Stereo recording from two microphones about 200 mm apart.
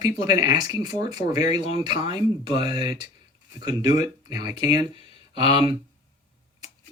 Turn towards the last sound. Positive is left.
turn(degrees=-25)  # may be behind; listen again after turning